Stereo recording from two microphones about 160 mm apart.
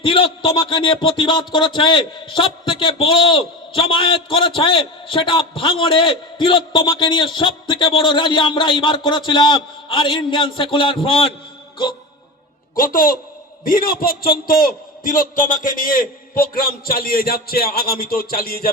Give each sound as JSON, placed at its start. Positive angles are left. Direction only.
{"t": 0.0, "sound": "a man's voice", "side_deg": 35}
{"t": 12.7, "sound": "a man's voice", "side_deg": 60}